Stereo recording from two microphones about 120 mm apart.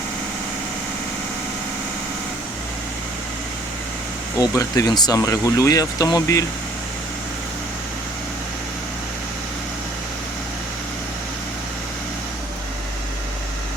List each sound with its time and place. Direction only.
4.4 s speech: 25° left (ahead or behind)